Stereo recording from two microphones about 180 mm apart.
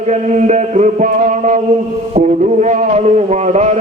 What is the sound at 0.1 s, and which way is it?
Mantra, 40° right (ahead or behind).